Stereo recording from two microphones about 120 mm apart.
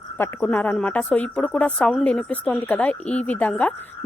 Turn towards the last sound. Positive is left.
turn(degrees=10)  # may be behind; listen again after turning